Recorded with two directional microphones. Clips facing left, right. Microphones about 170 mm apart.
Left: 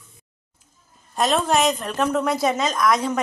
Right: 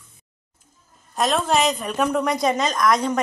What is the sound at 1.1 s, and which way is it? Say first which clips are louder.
A woman's voice: even; centre (ahead or behind).